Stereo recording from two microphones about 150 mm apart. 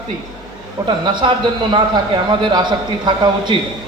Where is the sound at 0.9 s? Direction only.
30° right (ahead or behind).